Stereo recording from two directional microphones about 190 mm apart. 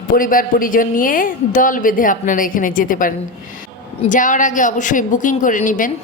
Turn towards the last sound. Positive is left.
turn(degrees=45)  # may be behind; listen again after turning